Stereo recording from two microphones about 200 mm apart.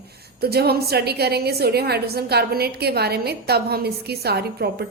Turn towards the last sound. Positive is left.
turn(degrees=-55)  # may be behind; listen again after turning